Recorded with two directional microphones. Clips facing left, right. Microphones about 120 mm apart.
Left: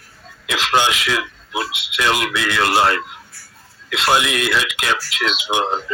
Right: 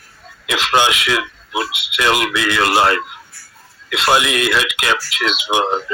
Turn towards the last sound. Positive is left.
turn(degrees=-70)  # may be behind; listen again after turning